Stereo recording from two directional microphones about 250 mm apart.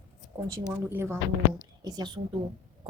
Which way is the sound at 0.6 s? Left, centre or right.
Centre.